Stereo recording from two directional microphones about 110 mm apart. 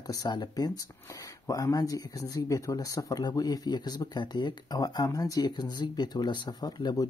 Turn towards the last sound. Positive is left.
turn(degrees=35)  # may be behind; listen again after turning